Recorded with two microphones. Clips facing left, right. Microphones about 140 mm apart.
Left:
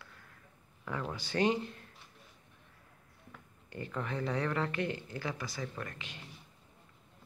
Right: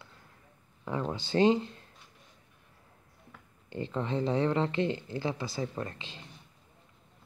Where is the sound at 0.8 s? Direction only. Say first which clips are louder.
Right 5 dB; 25° right (ahead or behind).